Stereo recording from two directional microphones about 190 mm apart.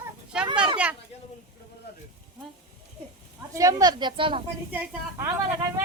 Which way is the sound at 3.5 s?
15° right (ahead or behind).